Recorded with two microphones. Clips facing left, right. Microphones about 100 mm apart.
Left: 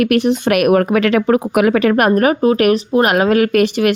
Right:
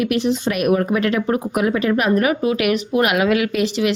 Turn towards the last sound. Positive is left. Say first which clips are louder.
# left 5 dB
turn(degrees=55)  # may be behind; listen again after turning